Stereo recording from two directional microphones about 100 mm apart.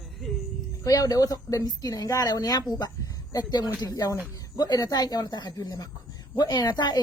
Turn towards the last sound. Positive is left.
turn(degrees=45)  # may be behind; listen again after turning